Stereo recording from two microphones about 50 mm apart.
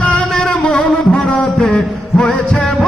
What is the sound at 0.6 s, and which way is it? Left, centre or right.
Music, centre.